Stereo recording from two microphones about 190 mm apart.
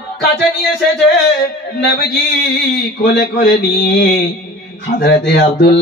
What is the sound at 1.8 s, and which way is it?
Mantra, 60° left (ahead or behind).